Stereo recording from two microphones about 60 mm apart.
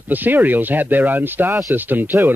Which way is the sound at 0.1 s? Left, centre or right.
Right.